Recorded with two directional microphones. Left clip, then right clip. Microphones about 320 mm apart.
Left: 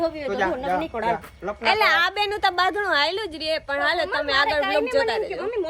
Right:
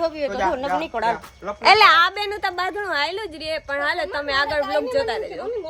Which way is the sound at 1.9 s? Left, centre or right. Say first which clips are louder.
Right 4 dB; centre.